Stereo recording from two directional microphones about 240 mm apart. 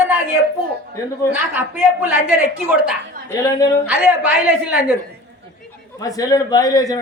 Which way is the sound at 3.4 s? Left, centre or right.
Centre.